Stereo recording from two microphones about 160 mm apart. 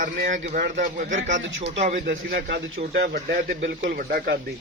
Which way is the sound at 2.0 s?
70° right (ahead or behind).